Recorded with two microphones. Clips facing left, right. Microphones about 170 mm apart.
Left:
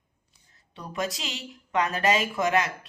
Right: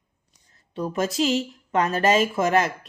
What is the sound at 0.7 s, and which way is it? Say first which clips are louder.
A woman's voice: right 7 dB; 45° right (ahead or behind).